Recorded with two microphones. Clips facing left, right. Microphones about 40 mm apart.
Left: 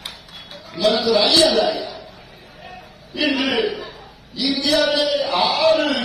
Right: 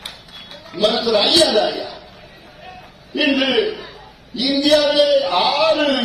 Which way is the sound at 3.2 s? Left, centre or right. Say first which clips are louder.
Right 3 dB; right.